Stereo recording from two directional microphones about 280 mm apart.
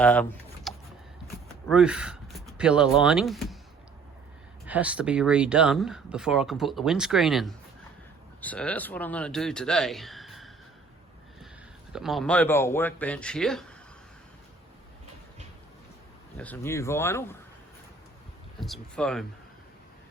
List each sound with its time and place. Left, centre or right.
0.0 s speech: centre
4.6 s speech: centre
11.9 s speech: centre
16.4 s speech: centre
18.6 s speech: centre